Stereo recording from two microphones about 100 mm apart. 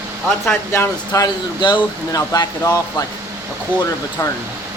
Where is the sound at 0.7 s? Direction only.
30° left (ahead or behind).